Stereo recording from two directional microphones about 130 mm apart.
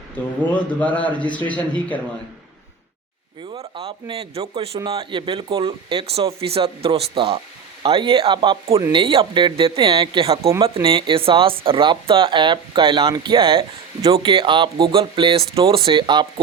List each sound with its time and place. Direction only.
0.5 s speech: 10° left (ahead or behind)
3.5 s speech: 45° right (ahead or behind)